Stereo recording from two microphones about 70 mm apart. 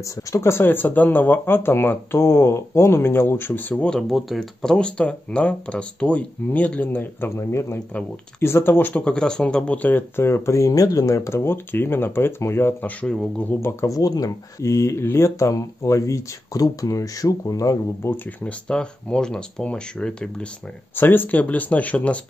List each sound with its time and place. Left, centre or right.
0.0 s speech: left
3.7 s speech: centre
9.0 s speech: centre; by 12.7 s left
12.8 s speech: centre
13.5 s speech: left
14.6 s speech: left
18.0 s speech: left
18.4 s speech: centre
20.9 s speech: left